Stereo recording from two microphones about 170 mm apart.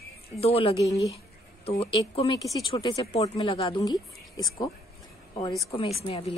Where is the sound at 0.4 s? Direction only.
35° left (ahead or behind).